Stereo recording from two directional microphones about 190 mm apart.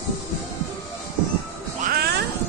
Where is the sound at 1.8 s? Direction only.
55° right (ahead or behind).